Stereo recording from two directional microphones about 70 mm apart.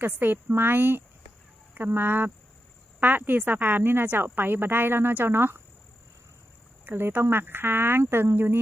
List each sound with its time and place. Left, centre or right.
0.0 s a woman's voice: right
6.8 s speech: right